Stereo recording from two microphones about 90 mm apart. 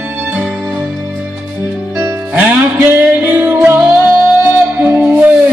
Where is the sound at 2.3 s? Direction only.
20° right (ahead or behind).